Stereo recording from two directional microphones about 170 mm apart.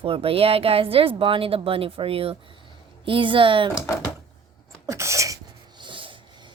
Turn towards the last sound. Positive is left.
turn(degrees=-30)  # may be behind; listen again after turning